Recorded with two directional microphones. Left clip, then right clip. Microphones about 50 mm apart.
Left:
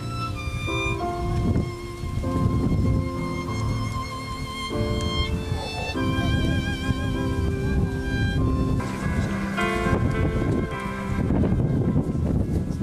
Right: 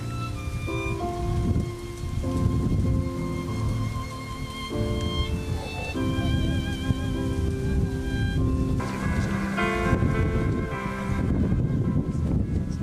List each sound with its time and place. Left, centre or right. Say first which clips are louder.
0.7 s music: left 4 dB; left
4.8 s music: left 3 dB; left
5.9 s music: left 2 dB; left
7.2 s music: left 2 dB; left
8.7 s music: left 1 dB; centre
11.1 s church bell: left 7 dB; centre